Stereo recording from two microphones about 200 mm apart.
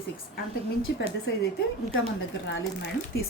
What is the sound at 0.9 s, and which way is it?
Speech, 55° left (ahead or behind).